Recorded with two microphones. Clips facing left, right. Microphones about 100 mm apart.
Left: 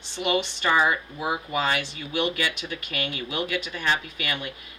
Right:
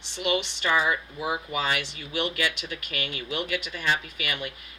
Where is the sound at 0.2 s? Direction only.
50° left (ahead or behind).